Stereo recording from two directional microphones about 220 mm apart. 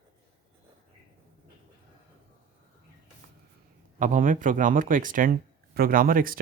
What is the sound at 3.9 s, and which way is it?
Speech, 35° right (ahead or behind).